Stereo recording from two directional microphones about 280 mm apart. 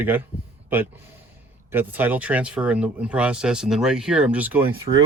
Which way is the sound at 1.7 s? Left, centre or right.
Centre.